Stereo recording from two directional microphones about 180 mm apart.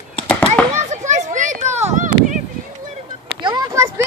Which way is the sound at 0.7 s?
45° right (ahead or behind).